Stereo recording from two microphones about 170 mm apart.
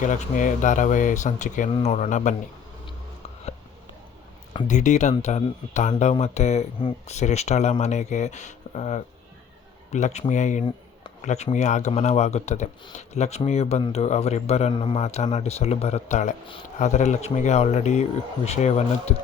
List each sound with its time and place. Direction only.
0.0 s speech: 50° left (ahead or behind)
4.7 s a man's voice: 45° left (ahead or behind)